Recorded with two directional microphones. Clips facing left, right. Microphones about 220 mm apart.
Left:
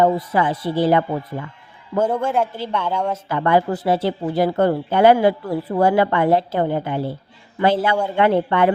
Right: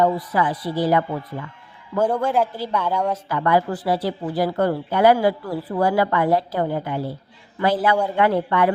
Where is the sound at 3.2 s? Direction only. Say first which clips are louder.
Left 4 dB; 25° left (ahead or behind).